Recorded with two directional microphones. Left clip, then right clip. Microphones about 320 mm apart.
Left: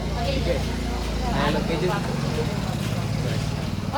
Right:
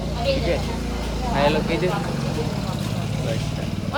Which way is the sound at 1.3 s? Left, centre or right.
Centre.